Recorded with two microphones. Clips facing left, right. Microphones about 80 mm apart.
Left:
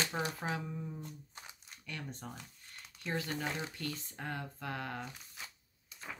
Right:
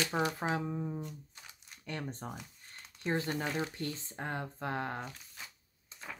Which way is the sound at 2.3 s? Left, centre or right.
Centre.